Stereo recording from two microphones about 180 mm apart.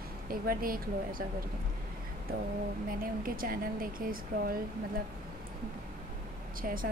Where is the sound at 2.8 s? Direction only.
50° right (ahead or behind).